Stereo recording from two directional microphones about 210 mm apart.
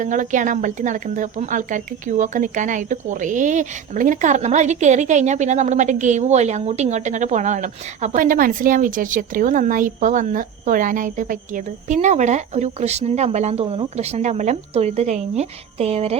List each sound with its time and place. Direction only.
0.0 s a woman's voice: 35° right (ahead or behind)